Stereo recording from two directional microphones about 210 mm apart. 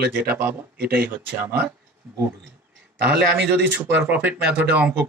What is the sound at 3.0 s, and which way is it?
Speech, 10° right (ahead or behind).